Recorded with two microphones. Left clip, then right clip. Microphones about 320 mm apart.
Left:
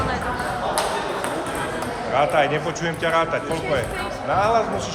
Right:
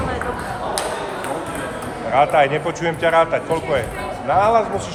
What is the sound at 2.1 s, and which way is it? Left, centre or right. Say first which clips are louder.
Speech: right 4 dB; right.